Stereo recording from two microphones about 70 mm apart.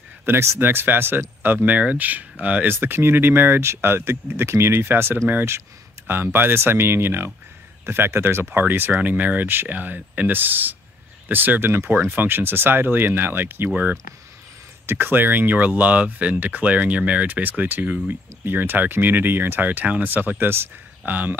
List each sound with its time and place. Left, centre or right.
0.2 s speech: right
14.9 s speech: right